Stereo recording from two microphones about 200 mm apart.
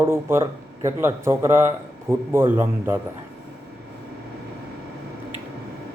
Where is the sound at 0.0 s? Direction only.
10° right (ahead or behind).